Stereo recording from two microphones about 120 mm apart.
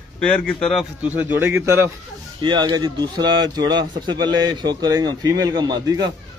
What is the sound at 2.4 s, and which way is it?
A man's voice, 40° right (ahead or behind).